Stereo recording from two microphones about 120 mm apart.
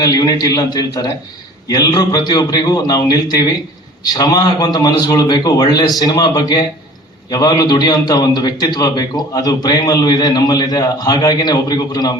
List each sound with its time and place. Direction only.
0.0 s a man's voice: 35° left (ahead or behind)